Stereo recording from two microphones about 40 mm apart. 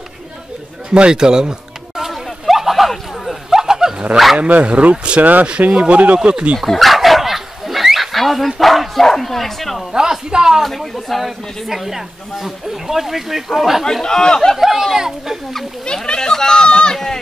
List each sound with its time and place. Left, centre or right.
0.8 s a sound: right; by 3.5 s centre
3.5 s wild animals: centre
4.4 s speech: right
5.2 s speech: right
5.6 s speech: right
6.7 s dog: centre
9.9 s a man's voice: centre
10.6 s speech: centre
14.0 s speech: centre
14.5 s a man's voice: centre
16.2 s speech: centre